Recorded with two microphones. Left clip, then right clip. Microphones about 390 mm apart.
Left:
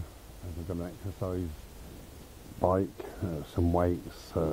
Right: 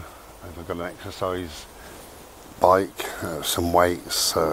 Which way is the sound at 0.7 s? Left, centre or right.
Centre.